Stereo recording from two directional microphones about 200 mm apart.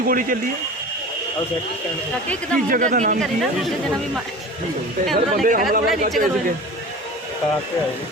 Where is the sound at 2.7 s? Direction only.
40° right (ahead or behind).